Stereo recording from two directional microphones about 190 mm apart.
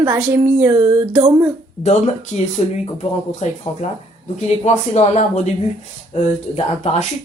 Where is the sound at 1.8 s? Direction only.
40° left (ahead or behind).